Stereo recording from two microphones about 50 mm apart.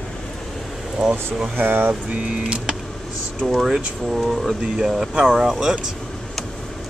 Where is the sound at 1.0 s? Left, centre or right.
Centre.